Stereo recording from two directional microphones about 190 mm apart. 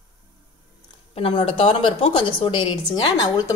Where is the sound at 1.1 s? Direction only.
30° left (ahead or behind).